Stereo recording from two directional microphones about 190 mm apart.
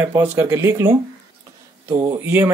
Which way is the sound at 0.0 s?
10° right (ahead or behind).